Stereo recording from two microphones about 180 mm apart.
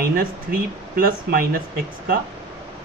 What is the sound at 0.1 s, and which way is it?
Speech, 55° right (ahead or behind).